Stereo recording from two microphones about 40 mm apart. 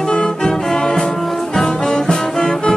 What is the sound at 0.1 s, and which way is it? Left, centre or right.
Music, left.